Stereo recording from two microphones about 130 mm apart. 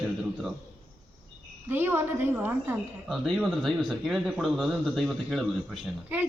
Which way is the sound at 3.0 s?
Centre (ahead or behind).